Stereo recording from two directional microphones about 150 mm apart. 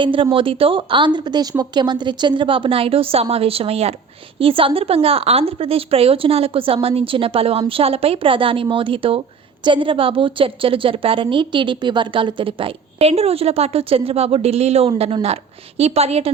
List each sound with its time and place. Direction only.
0.0 s a woman's voice: 35° right (ahead or behind)